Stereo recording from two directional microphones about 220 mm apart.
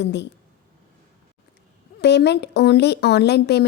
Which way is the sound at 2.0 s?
50° left (ahead or behind).